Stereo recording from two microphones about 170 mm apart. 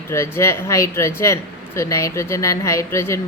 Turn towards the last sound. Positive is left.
turn(degrees=15)  # may be behind; listen again after turning